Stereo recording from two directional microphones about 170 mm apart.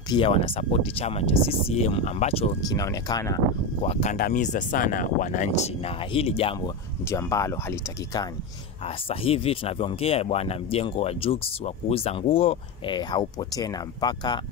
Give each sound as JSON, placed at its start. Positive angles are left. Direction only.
{"t": 0.1, "sound": "speech", "side_deg": 35}
{"t": 2.7, "sound": "speech", "side_deg": 20}
{"t": 3.8, "sound": "speech", "side_deg": 40}
{"t": 7.1, "sound": "speech", "side_deg": 20}
{"t": 8.8, "sound": "speech", "side_deg": 35}